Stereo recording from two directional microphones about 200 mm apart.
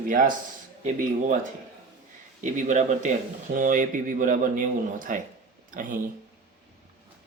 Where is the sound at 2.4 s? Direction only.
40° right (ahead or behind).